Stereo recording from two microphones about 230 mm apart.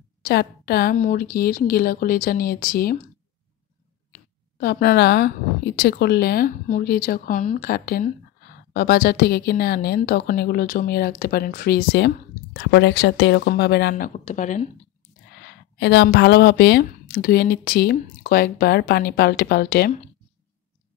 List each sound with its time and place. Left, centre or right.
0.2 s speech: left
4.1 s a woman's voice: left
15.8 s a woman's voice: left